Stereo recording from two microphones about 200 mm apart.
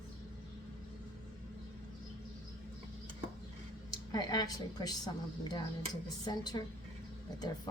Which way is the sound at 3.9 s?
20° left (ahead or behind).